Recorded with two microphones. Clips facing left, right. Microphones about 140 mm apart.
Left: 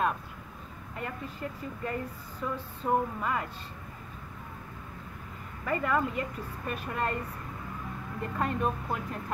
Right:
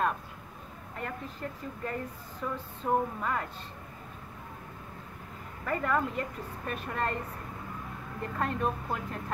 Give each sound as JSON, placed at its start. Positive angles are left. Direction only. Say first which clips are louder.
{"t": 0.9, "sound": "a woman's voice", "louder": "left 1 dB", "side_deg": 5}
{"t": 5.7, "sound": "a woman's voice", "louder": "left 1 dB", "side_deg": 5}
{"t": 8.2, "sound": "a woman's voice", "louder": "left 1 dB", "side_deg": 5}